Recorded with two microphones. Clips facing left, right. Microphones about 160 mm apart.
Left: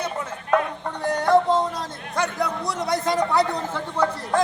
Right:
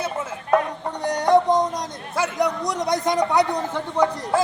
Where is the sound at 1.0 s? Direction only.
15° right (ahead or behind).